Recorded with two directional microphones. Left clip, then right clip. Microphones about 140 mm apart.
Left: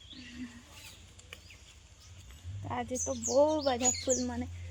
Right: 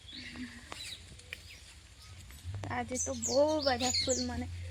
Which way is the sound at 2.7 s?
15° left (ahead or behind).